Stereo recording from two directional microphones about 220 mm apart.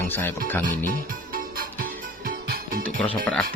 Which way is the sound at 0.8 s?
40° right (ahead or behind).